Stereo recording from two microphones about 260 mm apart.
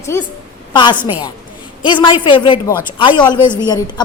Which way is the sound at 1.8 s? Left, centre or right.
Centre.